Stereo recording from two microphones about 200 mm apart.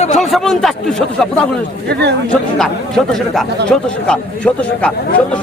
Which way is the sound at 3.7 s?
5° left (ahead or behind).